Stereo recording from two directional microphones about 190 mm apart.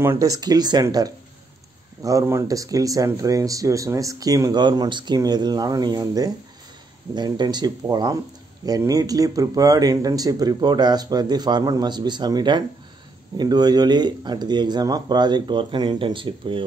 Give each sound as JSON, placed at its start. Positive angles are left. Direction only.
{"t": 0.0, "sound": "speech", "side_deg": -15}